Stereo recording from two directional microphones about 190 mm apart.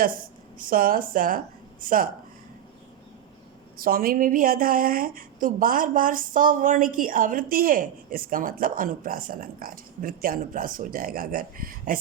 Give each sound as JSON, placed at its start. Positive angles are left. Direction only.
{"t": 0.7, "sound": "a woman's voice", "side_deg": -45}
{"t": 3.8, "sound": "a woman's voice", "side_deg": -50}